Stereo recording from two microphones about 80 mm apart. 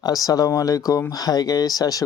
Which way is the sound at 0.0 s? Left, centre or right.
Left.